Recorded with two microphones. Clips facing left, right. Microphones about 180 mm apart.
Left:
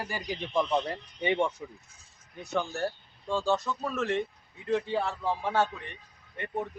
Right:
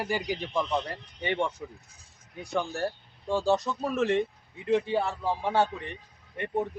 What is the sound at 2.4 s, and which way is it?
Speech, 10° right (ahead or behind).